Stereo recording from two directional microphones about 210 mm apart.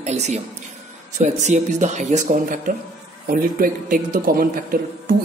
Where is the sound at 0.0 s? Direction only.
30° right (ahead or behind).